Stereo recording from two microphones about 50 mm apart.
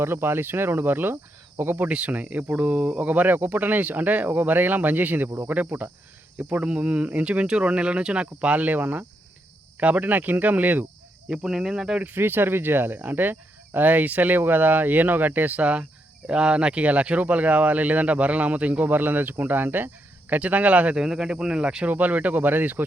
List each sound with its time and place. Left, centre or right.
0.0 s speech: right
1.9 s speech: right
11.3 s speech: centre
12.0 s speech: right
20.3 s speech: right
20.9 s speech: centre
21.8 s speech: right